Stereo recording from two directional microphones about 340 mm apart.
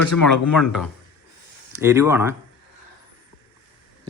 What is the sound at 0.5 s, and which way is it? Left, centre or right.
Speech, centre.